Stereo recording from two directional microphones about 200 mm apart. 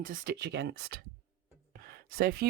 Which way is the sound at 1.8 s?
50° right (ahead or behind).